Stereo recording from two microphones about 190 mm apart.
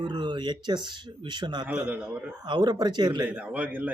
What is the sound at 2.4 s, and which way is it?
Speech, 25° right (ahead or behind).